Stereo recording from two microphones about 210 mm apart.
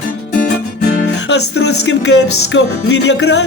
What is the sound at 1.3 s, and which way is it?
Music, 55° left (ahead or behind).